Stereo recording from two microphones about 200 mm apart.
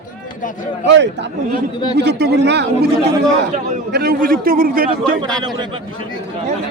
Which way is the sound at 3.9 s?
50° right (ahead or behind).